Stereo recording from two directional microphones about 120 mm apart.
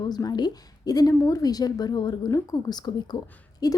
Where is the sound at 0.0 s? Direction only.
35° left (ahead or behind).